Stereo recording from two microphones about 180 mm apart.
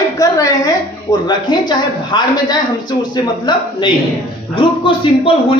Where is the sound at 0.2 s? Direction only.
20° left (ahead or behind).